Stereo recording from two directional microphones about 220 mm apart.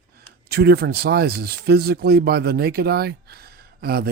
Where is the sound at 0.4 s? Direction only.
45° right (ahead or behind).